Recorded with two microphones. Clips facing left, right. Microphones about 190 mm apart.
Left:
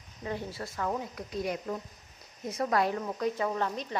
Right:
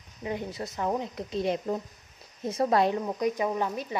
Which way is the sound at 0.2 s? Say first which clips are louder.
Right 3 dB; 15° right (ahead or behind).